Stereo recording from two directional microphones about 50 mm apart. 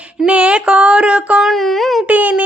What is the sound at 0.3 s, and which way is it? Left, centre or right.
Mantra, right.